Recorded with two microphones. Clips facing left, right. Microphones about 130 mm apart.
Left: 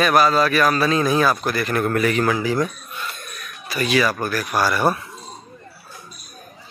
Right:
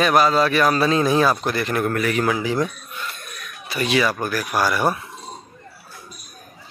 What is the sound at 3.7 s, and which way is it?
Speech, 25° right (ahead or behind).